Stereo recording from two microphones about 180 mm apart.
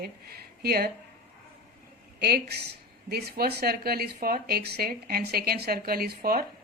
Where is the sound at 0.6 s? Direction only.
55° right (ahead or behind).